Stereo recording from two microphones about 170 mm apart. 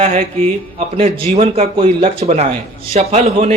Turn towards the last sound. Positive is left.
turn(degrees=-40)  # may be behind; listen again after turning